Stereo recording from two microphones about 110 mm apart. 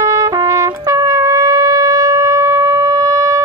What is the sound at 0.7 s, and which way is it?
Shofar, 35° right (ahead or behind).